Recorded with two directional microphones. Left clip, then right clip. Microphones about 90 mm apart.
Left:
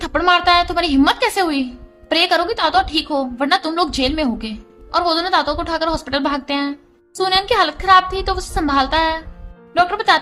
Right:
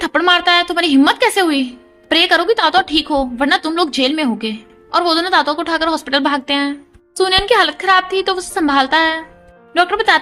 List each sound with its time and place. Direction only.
0.3 s speech: 45° right (ahead or behind)
9.7 s speech: 35° right (ahead or behind)